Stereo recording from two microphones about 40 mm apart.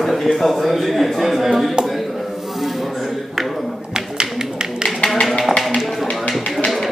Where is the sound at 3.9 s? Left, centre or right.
Centre.